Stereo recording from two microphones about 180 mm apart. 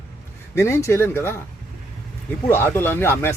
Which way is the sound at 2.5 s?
15° left (ahead or behind).